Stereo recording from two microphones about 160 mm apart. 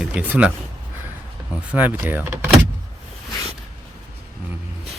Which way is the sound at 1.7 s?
10° right (ahead or behind).